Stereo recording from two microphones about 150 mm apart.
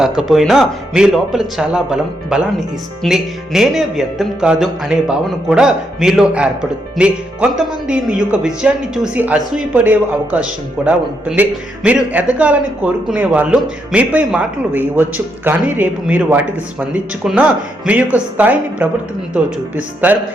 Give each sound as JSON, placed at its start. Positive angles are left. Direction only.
{"t": 0.0, "sound": "speech", "side_deg": -5}